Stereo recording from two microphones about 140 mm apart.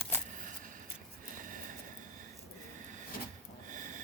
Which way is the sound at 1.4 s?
70° right (ahead or behind).